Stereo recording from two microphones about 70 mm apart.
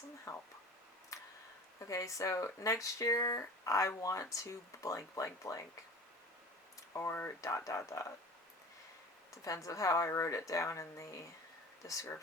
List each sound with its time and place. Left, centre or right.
0.3 s speech: left
1.1 s a sound: left
1.8 s speech: left
6.9 s speech: left
7.4 s speech: left
9.3 s speech: left